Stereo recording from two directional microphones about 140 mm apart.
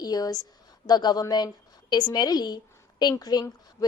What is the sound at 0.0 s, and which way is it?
A woman's voice, 25° left (ahead or behind).